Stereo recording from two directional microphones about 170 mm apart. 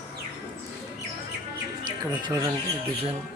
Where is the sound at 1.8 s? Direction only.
25° right (ahead or behind).